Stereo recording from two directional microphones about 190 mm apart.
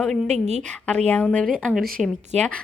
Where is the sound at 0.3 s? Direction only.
35° right (ahead or behind).